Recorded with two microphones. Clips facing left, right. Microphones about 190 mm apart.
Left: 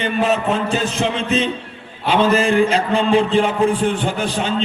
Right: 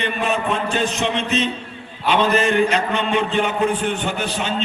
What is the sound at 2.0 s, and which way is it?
A man's voice, 30° left (ahead or behind).